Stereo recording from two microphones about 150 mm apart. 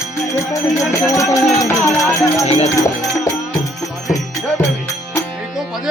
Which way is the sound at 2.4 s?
50° left (ahead or behind).